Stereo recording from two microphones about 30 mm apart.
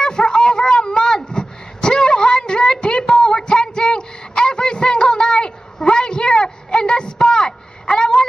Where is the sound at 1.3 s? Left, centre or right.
Left.